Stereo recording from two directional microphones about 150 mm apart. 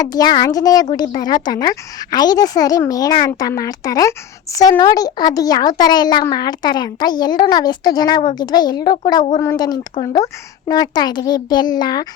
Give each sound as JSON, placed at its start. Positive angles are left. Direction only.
{"t": 0.0, "sound": "a woman's voice", "side_deg": 25}